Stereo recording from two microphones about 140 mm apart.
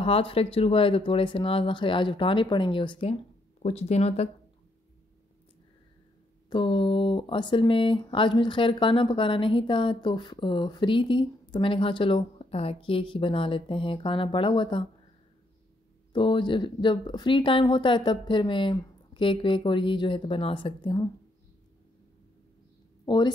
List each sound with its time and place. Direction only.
0.0 s a woman's voice: 40° left (ahead or behind)
3.6 s speech: 50° left (ahead or behind)
6.5 s a woman's voice: 35° left (ahead or behind)
16.1 s a woman's voice: 35° left (ahead or behind)
23.0 s speech: 30° left (ahead or behind)